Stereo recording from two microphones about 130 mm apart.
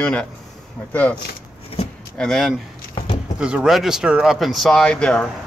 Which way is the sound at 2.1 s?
5° left (ahead or behind).